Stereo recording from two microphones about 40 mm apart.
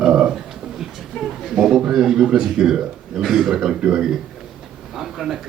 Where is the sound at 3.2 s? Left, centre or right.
Centre.